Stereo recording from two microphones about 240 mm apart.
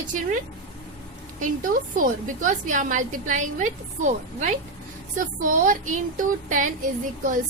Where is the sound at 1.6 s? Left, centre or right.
Right.